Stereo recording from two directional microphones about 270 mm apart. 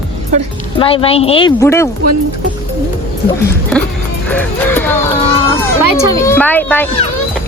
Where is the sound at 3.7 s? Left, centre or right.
Centre.